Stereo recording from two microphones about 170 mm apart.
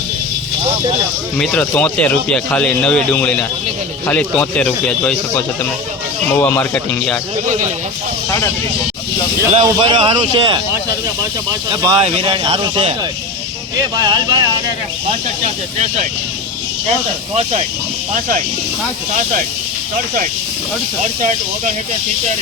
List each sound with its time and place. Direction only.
1.4 s speech: 5° left (ahead or behind)
6.4 s speech: 10° left (ahead or behind)
9.6 s a man's voice: 30° right (ahead or behind)
11.7 s a man's voice: 25° right (ahead or behind)
14.0 s a man's voice: 25° right (ahead or behind)